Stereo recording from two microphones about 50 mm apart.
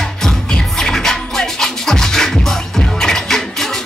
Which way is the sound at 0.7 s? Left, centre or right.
Centre.